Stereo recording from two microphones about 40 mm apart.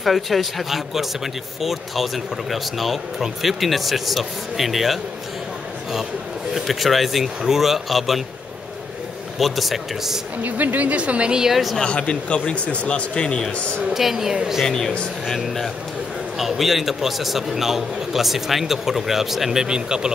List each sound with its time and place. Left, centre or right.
0.0 s speech: centre
6.5 s speech: centre
9.4 s speech: centre
10.4 s a woman's voice: right
11.4 s speech: centre
11.8 s speech: left
13.9 s a woman's voice: centre
14.3 s a woman's voice: centre
14.6 s speech: centre
15.2 s speech: centre
19.6 s speech: centre